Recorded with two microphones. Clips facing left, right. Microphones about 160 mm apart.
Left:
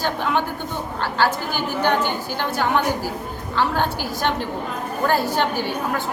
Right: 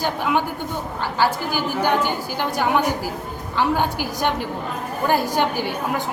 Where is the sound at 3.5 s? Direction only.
15° right (ahead or behind).